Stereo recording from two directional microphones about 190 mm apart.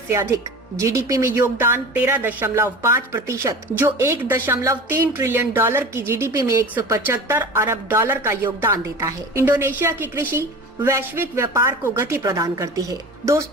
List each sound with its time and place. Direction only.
0.1 s a woman's voice: 15° right (ahead or behind)